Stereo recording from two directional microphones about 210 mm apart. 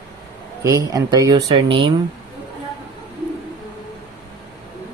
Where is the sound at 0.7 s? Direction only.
15° right (ahead or behind).